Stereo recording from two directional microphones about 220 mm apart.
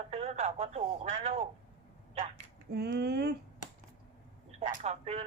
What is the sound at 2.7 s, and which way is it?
Speech, 50° right (ahead or behind).